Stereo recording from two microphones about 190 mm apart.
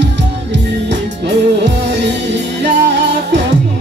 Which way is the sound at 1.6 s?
65° right (ahead or behind).